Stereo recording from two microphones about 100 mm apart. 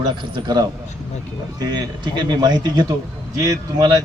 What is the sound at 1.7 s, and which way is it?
A man's voice, 45° right (ahead or behind).